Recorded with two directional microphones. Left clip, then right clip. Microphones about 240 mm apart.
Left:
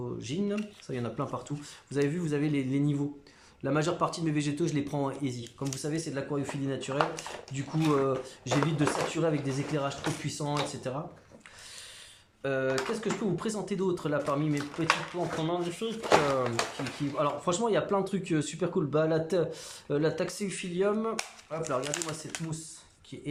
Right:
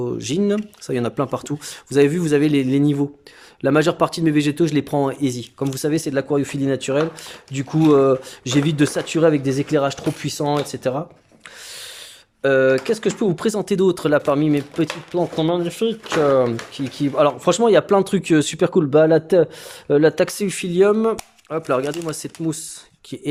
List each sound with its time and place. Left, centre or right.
0.0 s speech: right
12.4 s speech: right
17.2 s speech: right